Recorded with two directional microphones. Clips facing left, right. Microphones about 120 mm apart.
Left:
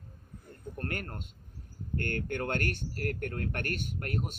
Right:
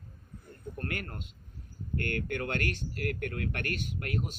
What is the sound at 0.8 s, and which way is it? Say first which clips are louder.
Speech: left 1 dB; 45° left (ahead or behind).